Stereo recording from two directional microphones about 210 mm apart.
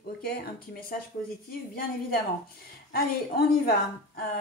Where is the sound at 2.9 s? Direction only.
45° left (ahead or behind).